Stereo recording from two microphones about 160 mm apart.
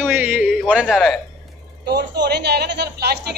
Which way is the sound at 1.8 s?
90° right.